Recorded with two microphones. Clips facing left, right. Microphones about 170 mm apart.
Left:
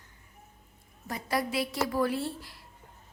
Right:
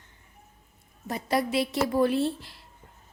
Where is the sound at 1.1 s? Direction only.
25° right (ahead or behind).